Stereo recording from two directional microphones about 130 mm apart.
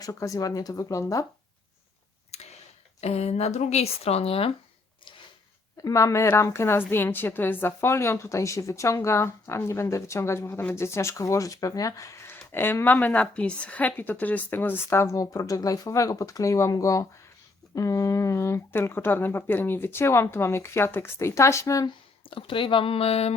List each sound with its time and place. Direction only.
0.0 s a woman's voice: 25° left (ahead or behind)
2.3 s a sound: 55° left (ahead or behind)
3.0 s speech: 55° left (ahead or behind)
5.8 s a woman's voice: 25° left (ahead or behind)
22.3 s speech: 40° left (ahead or behind)